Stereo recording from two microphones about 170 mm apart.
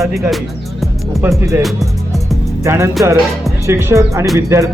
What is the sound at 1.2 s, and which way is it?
Speech, 15° right (ahead or behind).